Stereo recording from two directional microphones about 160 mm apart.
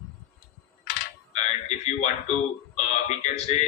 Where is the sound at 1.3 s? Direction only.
45° left (ahead or behind).